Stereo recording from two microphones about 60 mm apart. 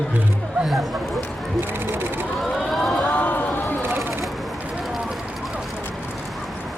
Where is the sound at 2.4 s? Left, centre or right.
Centre.